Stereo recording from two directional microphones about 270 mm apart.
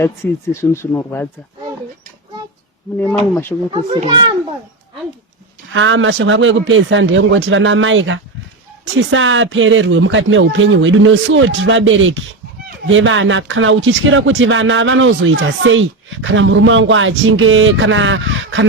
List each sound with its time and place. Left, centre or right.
0.0 s speech: centre
3.7 s a child's voice: centre
5.7 s speech: right